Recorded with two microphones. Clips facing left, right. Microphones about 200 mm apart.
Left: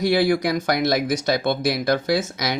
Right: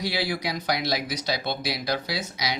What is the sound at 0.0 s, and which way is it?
Speech, 50° left (ahead or behind).